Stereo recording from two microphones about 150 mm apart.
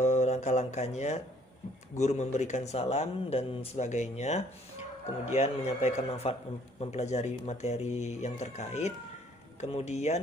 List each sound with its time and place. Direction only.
0.0 s a man's voice: 50° left (ahead or behind)